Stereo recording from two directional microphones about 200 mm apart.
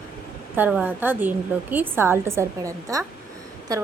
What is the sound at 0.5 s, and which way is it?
A woman's voice, 10° right (ahead or behind).